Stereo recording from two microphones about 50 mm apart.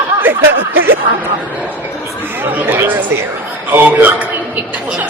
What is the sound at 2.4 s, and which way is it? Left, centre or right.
A woman's voice, right.